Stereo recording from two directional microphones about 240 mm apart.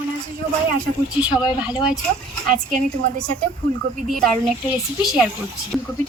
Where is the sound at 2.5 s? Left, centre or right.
Right.